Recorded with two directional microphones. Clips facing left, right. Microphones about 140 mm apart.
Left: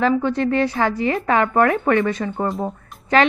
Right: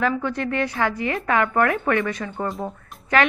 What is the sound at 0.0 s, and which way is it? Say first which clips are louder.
A woman's voice: left 5 dB; 30° left (ahead or behind).